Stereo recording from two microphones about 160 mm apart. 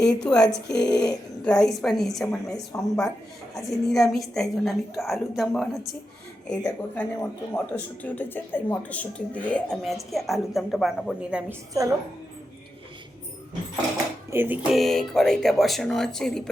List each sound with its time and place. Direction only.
0.1 s speech: 5° left (ahead or behind)
11.7 s a woman's voice: 20° right (ahead or behind)
14.3 s speech: 10° right (ahead or behind); by 16.5 s 5° left (ahead or behind)